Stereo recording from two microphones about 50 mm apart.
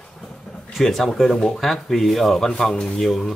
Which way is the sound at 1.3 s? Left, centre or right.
Centre.